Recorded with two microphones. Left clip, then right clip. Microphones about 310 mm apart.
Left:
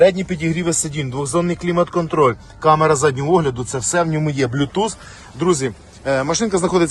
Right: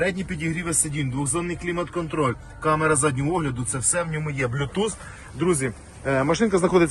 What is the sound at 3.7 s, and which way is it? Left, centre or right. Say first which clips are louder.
Speech: left 7 dB; centre.